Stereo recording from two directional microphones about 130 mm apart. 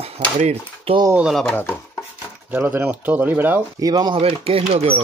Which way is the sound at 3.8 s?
30° right (ahead or behind).